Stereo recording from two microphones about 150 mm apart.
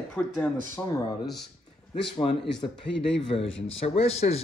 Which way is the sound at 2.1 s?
40° left (ahead or behind).